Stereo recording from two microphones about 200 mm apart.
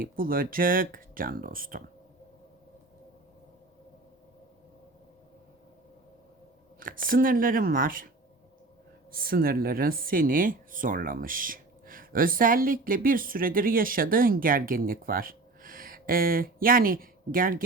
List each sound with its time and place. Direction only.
0.0 s speech: 45° right (ahead or behind)
6.7 s speech: 45° right (ahead or behind)
9.1 s speech: 45° right (ahead or behind)